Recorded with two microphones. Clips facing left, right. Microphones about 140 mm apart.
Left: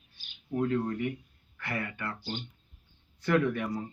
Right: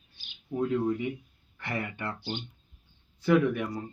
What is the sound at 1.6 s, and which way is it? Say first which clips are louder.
Speech: right 1 dB; 25° right (ahead or behind).